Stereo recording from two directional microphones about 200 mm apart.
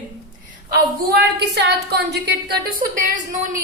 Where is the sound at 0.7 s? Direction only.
50° right (ahead or behind).